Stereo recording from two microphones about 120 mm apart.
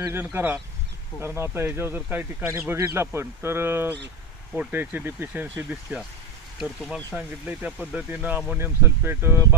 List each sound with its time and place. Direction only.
0.1 s speech: 15° right (ahead or behind)